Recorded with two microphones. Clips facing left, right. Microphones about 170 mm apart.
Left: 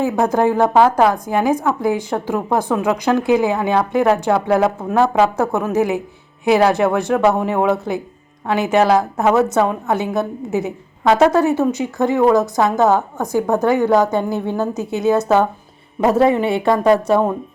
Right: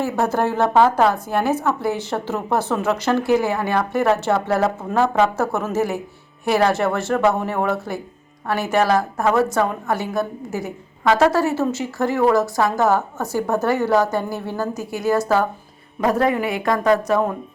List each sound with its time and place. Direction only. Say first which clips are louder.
0.0 s a woman's voice: left 4 dB; 15° left (ahead or behind)